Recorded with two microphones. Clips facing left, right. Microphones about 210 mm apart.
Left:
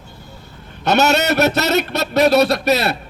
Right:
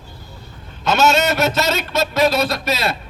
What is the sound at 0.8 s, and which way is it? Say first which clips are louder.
A man's voice: left 1 dB; 65° left (ahead or behind).